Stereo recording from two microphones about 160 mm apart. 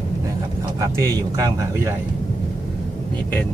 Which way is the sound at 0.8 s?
20° right (ahead or behind).